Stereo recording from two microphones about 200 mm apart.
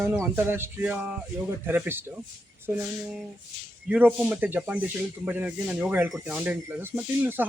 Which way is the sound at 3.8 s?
5° right (ahead or behind).